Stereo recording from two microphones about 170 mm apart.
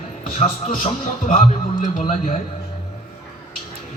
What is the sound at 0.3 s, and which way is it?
A man's voice, 40° left (ahead or behind).